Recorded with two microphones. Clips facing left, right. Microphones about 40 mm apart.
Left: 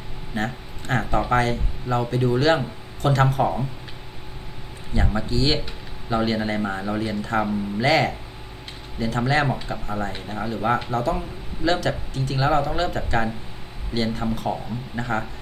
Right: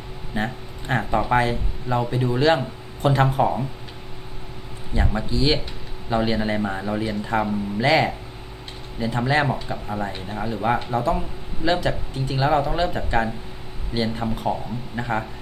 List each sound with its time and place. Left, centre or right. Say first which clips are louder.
0.3 s speech: even; centre
4.9 s speech: even; centre
11.6 s speech: even; centre